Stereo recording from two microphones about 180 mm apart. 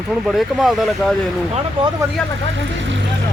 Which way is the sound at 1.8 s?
30° right (ahead or behind).